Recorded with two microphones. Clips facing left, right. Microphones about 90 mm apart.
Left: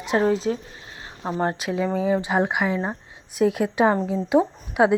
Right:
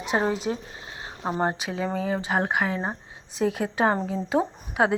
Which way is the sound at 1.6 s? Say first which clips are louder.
Left 5 dB; centre (ahead or behind).